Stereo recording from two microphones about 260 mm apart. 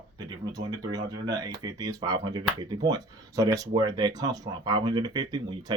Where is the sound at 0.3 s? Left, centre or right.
Centre.